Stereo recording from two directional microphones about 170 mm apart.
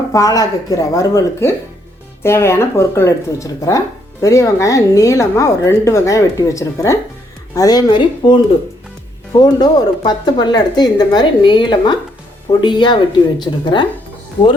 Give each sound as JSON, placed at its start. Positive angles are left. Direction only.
{"t": 0.1, "sound": "speech", "side_deg": 20}